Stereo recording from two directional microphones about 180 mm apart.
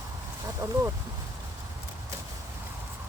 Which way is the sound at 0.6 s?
20° right (ahead or behind).